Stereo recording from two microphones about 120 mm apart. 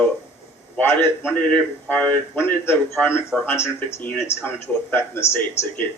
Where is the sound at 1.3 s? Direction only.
15° left (ahead or behind).